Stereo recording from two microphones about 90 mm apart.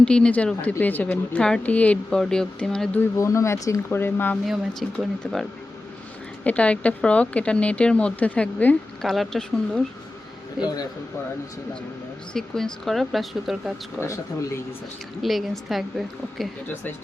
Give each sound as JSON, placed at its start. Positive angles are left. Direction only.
{"t": 0.0, "sound": "speech", "side_deg": 10}
{"t": 1.4, "sound": "speech", "side_deg": 10}
{"t": 3.2, "sound": "speech", "side_deg": 35}
{"t": 4.4, "sound": "speech", "side_deg": 0}
{"t": 6.4, "sound": "speech", "side_deg": 15}
{"t": 9.0, "sound": "speech", "side_deg": 5}
{"t": 10.6, "sound": "a man's voice", "side_deg": -5}
{"t": 12.3, "sound": "speech", "side_deg": 5}
{"t": 14.0, "sound": "speech", "side_deg": 30}
{"t": 15.2, "sound": "speech", "side_deg": 0}